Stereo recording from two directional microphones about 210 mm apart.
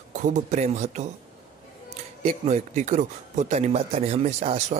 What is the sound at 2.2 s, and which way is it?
Speech, 30° right (ahead or behind).